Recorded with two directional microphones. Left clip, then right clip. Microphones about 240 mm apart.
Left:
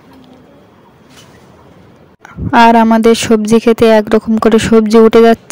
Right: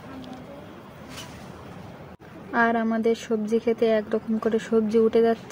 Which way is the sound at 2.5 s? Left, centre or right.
Left.